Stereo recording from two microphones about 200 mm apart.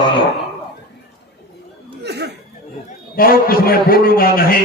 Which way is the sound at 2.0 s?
55° right (ahead or behind).